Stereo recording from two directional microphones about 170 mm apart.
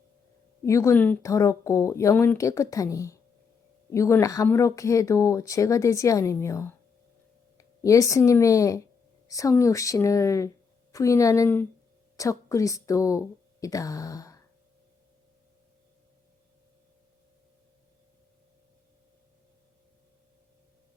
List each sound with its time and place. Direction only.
0.6 s speech: 15° left (ahead or behind)